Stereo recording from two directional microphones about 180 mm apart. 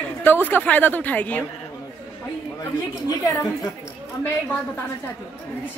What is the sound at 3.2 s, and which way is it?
Speech, 20° left (ahead or behind).